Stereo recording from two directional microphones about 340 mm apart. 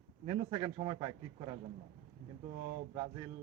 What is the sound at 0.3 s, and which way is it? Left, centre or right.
A man's voice, centre.